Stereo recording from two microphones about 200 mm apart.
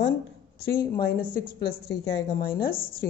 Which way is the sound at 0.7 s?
50° left (ahead or behind).